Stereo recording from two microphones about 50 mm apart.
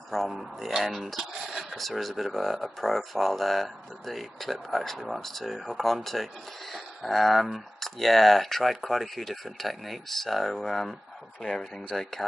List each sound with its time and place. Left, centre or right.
0.1 s speech: centre